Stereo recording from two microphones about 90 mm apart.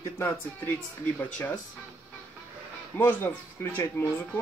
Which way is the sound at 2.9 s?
25° left (ahead or behind).